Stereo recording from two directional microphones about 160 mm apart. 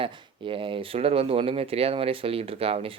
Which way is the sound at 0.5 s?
35° right (ahead or behind).